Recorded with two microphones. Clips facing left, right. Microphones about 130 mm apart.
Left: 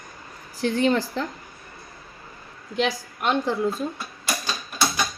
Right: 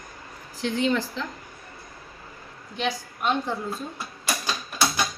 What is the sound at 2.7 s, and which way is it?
Speech, 90° left.